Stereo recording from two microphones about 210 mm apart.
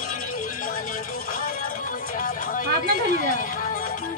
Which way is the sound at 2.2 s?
40° left (ahead or behind).